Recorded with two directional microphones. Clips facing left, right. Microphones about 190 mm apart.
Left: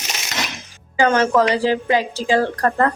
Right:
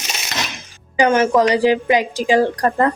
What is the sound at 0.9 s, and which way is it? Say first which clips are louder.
A woman's voice: right 2 dB; 15° right (ahead or behind).